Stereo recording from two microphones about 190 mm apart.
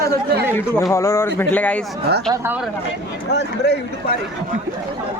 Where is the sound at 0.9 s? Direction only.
15° left (ahead or behind).